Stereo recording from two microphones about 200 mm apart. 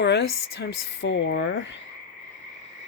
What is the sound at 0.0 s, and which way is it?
Speech, 55° left (ahead or behind).